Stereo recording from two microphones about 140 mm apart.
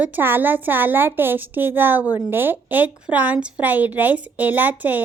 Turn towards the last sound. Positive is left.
turn(degrees=-10)  # may be behind; listen again after turning